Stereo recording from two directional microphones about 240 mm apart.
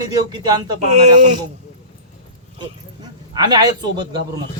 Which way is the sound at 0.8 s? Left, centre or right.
Right.